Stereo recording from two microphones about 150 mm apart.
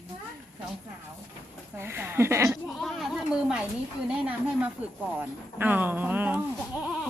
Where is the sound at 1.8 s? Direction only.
15° right (ahead or behind).